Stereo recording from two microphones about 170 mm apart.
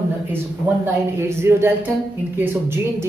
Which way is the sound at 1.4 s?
15° right (ahead or behind).